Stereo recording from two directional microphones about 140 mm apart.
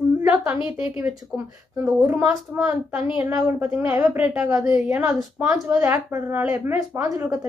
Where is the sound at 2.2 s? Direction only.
5° right (ahead or behind).